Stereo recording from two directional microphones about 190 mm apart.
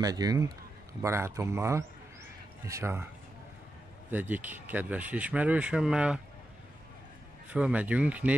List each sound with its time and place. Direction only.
0.0 s speech: 20° right (ahead or behind)
4.1 s speech: 10° right (ahead or behind)
7.4 s speech: 5° right (ahead or behind)